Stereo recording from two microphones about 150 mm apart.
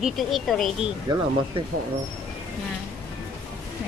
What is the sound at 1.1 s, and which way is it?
Speech, 30° right (ahead or behind).